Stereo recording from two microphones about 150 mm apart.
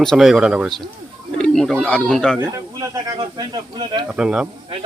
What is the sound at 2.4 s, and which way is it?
Speech, 25° right (ahead or behind).